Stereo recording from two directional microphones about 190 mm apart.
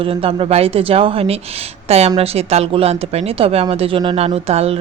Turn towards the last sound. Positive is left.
turn(degrees=-35)  # may be behind; listen again after turning